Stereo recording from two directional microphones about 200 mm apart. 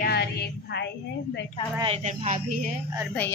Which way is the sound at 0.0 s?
55° left (ahead or behind).